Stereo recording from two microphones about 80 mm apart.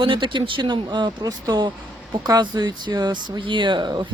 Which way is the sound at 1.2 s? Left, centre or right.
Right.